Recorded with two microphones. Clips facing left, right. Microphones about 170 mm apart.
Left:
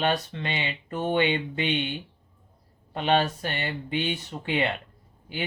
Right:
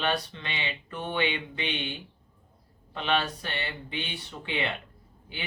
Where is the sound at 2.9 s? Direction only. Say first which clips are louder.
Left 5 dB; 45° left (ahead or behind).